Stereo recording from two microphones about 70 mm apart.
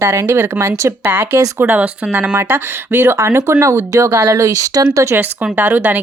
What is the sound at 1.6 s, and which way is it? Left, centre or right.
Speech, right.